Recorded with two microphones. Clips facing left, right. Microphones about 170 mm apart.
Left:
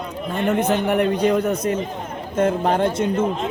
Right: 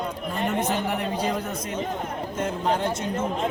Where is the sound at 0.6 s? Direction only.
60° left (ahead or behind).